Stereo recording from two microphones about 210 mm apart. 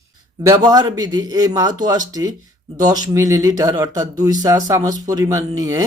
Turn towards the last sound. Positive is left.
turn(degrees=-15)  # may be behind; listen again after turning